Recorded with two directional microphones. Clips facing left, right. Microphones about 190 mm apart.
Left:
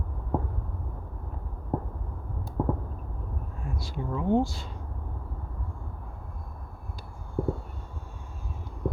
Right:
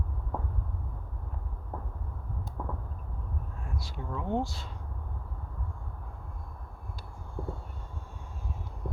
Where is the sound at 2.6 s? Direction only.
40° left (ahead or behind).